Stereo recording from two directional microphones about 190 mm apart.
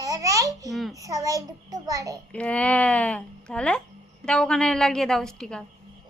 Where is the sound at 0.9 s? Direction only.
15° right (ahead or behind).